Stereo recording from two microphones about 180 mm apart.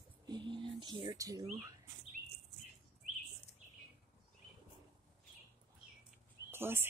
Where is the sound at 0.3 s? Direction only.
25° right (ahead or behind).